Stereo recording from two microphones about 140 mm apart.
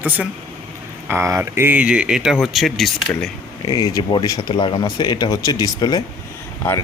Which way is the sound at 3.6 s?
30° left (ahead or behind).